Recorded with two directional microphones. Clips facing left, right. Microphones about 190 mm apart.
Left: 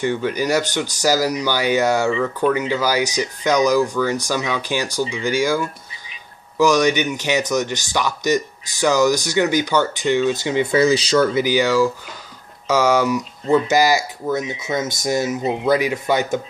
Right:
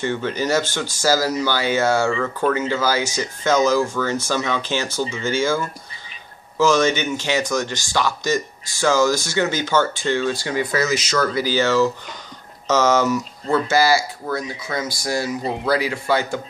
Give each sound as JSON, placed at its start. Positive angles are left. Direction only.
{"t": 0.0, "sound": "speech", "side_deg": 15}
{"t": 2.0, "sound": "speech", "side_deg": 5}
{"t": 2.7, "sound": "speech", "side_deg": 15}
{"t": 11.3, "sound": "speech", "side_deg": 15}